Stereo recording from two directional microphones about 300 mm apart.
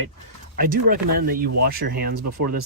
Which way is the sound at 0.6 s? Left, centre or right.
Right.